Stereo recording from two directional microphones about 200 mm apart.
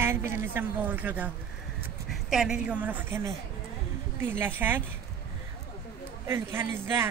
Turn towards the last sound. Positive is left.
turn(degrees=-10)  # may be behind; listen again after turning